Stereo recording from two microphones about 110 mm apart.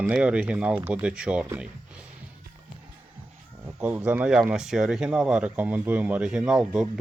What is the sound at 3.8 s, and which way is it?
Speech, 10° right (ahead or behind).